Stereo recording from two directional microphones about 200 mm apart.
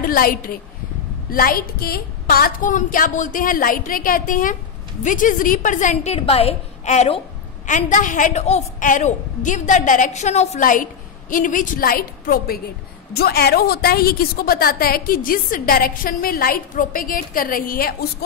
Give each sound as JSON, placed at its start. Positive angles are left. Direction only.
{"t": 0.0, "sound": "a woman's voice", "side_deg": 45}